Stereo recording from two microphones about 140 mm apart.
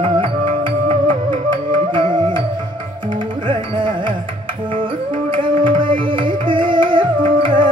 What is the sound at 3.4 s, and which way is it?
Carnatic music, 35° right (ahead or behind).